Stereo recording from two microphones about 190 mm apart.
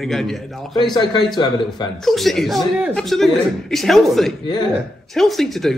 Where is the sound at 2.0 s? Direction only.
Centre (ahead or behind).